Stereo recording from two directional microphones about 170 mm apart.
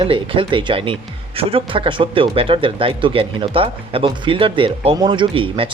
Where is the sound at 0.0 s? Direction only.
30° right (ahead or behind).